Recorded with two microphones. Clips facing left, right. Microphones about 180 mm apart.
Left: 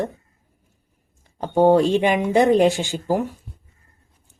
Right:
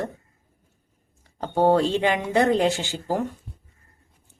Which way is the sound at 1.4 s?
15° left (ahead or behind).